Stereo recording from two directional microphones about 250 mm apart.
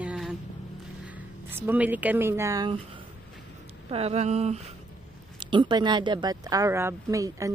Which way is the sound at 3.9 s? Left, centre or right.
Right.